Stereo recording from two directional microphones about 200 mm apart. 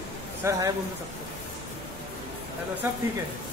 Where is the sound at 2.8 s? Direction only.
10° right (ahead or behind).